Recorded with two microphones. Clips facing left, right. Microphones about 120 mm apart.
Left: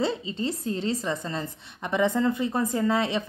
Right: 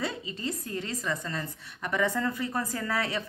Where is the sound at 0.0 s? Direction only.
25° left (ahead or behind).